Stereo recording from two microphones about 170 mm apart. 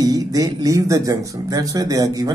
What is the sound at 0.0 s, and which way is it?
Speech, 20° right (ahead or behind).